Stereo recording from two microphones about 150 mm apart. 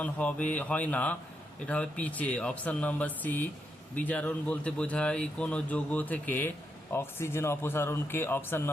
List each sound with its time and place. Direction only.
0.0 s speech: 10° left (ahead or behind)